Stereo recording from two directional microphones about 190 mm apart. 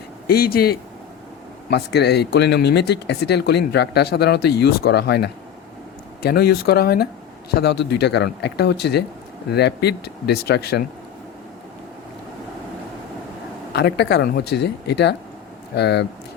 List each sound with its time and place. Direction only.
0.3 s speech: 50° left (ahead or behind)
13.7 s speech: 60° left (ahead or behind)